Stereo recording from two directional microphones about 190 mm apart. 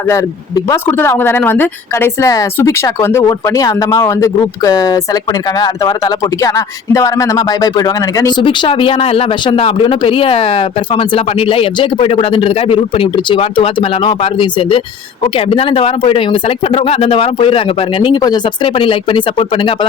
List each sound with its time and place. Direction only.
0.1 s speech: 15° left (ahead or behind)